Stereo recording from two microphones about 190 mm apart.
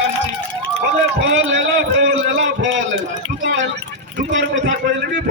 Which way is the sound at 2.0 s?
70° right (ahead or behind).